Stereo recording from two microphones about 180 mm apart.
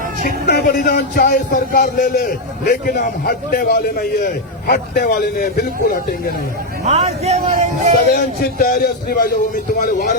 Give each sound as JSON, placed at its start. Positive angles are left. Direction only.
{"t": 0.2, "sound": "speech", "side_deg": 55}
{"t": 6.8, "sound": "a man's voice", "side_deg": -35}
{"t": 8.1, "sound": "speech", "side_deg": 55}